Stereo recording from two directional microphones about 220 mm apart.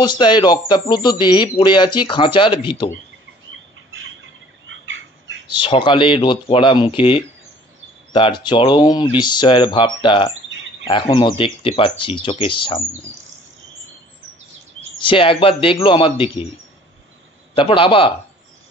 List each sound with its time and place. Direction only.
0.0 s speech: 20° left (ahead or behind)
4.6 s turkey: 60° right (ahead or behind)
5.5 s speech: 20° left (ahead or behind)
15.0 s speech: 25° left (ahead or behind)
17.6 s speech: 25° left (ahead or behind)